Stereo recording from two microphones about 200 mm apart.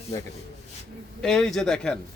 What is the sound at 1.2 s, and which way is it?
Speech, centre (ahead or behind).